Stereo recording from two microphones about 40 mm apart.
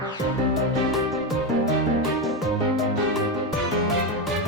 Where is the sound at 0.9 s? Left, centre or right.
Centre.